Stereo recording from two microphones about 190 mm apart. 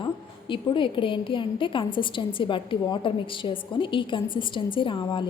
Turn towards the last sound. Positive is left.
turn(degrees=25)  # may be behind; listen again after turning